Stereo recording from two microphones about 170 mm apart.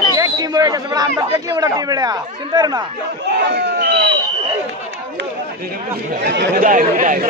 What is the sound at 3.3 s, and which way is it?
Speech, 85° right.